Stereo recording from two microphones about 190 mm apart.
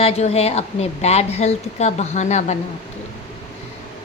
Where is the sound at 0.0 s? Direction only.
35° left (ahead or behind).